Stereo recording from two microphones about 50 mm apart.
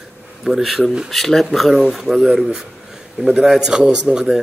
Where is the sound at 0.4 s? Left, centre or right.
Centre.